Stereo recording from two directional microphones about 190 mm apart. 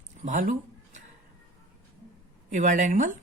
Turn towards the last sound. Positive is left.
turn(degrees=-40)  # may be behind; listen again after turning